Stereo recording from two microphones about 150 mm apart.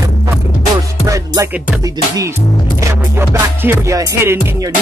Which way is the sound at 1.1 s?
25° right (ahead or behind).